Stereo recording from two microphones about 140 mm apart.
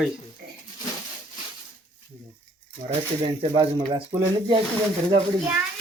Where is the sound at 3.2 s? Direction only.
35° right (ahead or behind).